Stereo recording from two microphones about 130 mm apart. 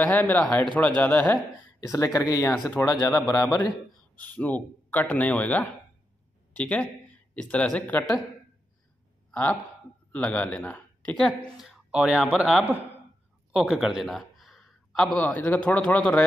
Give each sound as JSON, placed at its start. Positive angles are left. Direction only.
{"t": 0.0, "sound": "speech", "side_deg": 15}
{"t": 1.8, "sound": "speech", "side_deg": 25}
{"t": 3.1, "sound": "speech", "side_deg": 10}
{"t": 9.3, "sound": "speech", "side_deg": 10}
{"t": 11.6, "sound": "a man's voice", "side_deg": -5}
{"t": 13.5, "sound": "a sound", "side_deg": -5}
{"t": 15.1, "sound": "speech", "side_deg": 10}